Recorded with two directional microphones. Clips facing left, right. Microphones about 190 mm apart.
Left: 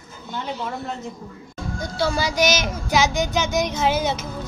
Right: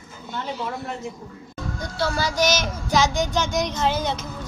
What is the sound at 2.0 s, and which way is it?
Speech, 15° left (ahead or behind).